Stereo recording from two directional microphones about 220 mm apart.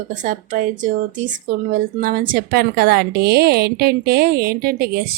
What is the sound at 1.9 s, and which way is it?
A woman's voice, 40° right (ahead or behind).